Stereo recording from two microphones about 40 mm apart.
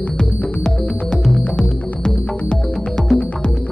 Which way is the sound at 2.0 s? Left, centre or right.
Centre.